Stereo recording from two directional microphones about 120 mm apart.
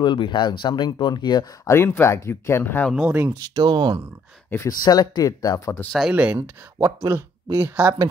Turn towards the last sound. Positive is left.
turn(degrees=-15)  # may be behind; listen again after turning